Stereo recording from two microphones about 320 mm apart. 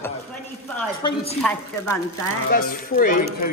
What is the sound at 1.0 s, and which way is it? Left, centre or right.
Speech, centre.